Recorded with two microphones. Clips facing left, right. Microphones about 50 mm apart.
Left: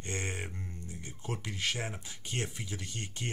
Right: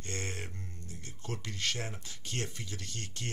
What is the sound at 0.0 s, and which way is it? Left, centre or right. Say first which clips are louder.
Speech: left 2 dB; centre.